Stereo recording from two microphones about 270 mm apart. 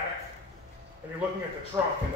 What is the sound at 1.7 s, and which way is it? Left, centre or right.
Speech, centre.